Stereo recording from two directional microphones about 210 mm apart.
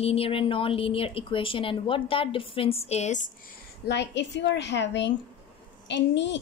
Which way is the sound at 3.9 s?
55° left (ahead or behind).